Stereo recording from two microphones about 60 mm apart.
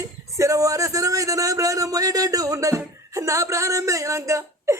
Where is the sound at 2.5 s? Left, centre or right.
Right.